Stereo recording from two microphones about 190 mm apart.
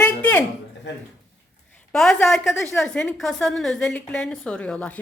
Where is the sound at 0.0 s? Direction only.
10° left (ahead or behind).